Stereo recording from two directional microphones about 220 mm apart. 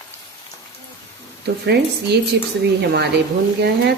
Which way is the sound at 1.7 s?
50° right (ahead or behind).